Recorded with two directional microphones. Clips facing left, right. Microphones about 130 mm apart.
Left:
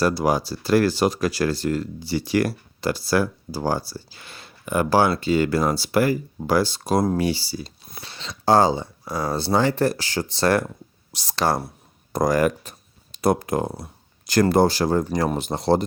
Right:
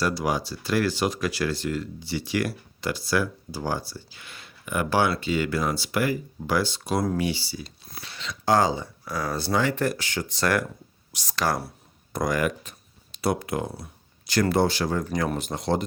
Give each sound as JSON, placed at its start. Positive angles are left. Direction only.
{"t": 0.0, "sound": "speech", "side_deg": 40}